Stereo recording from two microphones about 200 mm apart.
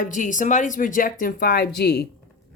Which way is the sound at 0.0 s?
40° left (ahead or behind).